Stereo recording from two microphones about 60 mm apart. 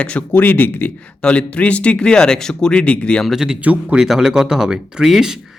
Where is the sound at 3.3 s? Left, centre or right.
Centre.